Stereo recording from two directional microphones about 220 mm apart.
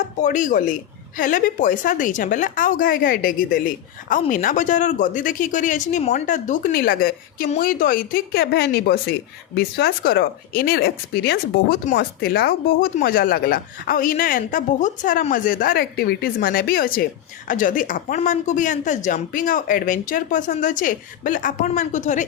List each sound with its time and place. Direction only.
0.2 s speech: 35° left (ahead or behind)